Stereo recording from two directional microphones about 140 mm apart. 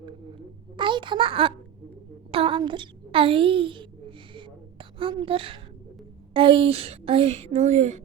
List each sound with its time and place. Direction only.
0.8 s a child's voice: 35° right (ahead or behind)
4.4 s a sound: 35° right (ahead or behind)
6.3 s a woman's voice: 40° right (ahead or behind)